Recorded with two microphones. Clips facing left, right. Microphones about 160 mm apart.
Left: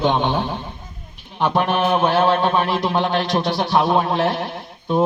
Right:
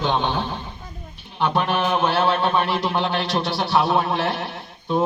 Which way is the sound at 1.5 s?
15° left (ahead or behind).